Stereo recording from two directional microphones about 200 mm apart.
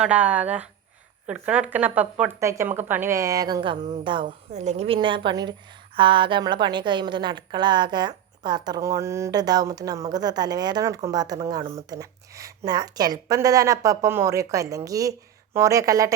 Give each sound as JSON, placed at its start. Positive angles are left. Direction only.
{"t": 0.0, "sound": "a woman's voice", "side_deg": -5}